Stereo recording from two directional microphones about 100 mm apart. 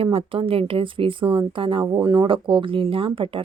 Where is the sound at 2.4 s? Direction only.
60° right (ahead or behind).